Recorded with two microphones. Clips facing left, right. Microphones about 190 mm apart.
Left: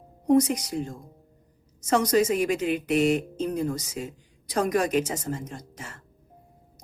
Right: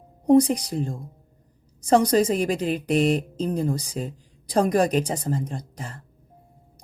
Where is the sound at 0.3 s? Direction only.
30° right (ahead or behind).